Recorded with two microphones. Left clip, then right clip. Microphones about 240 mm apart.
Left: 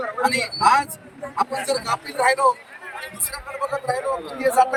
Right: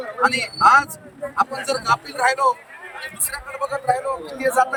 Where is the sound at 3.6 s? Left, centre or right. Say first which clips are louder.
Right 3 dB; centre.